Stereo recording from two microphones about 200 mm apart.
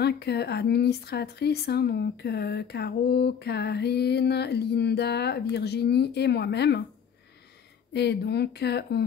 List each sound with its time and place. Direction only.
0.0 s speech: 55° left (ahead or behind)
7.9 s speech: 55° left (ahead or behind)